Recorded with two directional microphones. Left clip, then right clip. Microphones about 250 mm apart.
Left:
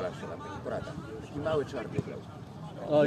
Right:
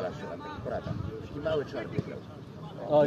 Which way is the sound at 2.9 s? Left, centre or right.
Centre.